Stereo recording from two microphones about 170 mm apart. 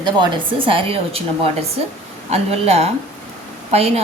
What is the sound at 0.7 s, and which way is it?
Speech, 30° right (ahead or behind).